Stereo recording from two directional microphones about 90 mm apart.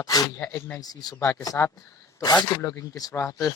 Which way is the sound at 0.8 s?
45° left (ahead or behind).